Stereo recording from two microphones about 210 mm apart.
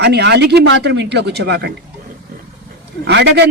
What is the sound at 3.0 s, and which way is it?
Speech, 55° right (ahead or behind).